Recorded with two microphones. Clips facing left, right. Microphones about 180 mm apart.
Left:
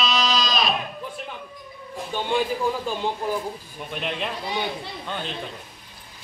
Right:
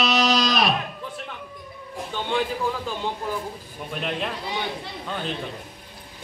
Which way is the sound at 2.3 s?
15° left (ahead or behind).